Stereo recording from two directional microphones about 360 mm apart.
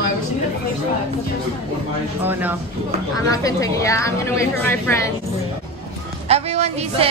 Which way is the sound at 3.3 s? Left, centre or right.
Centre.